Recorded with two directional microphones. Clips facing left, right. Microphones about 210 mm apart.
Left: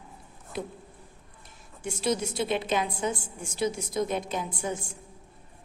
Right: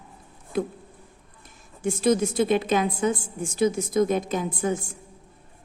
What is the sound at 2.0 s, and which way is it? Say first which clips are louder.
Speech: right 7 dB; 50° right (ahead or behind).